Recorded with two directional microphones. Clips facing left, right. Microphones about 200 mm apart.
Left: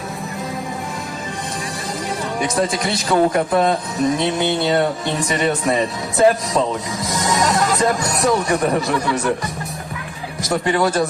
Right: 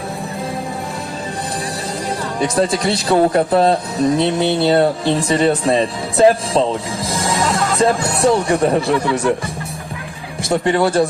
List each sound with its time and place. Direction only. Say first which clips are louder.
2.6 s a man's voice: right 5 dB; 35° right (ahead or behind)
10.5 s speech: right 3 dB; 30° right (ahead or behind)